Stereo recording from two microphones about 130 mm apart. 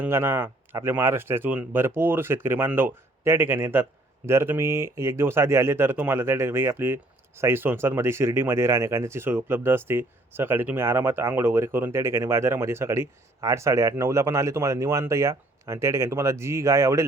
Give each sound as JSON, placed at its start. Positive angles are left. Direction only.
{"t": 0.0, "sound": "speech", "side_deg": -20}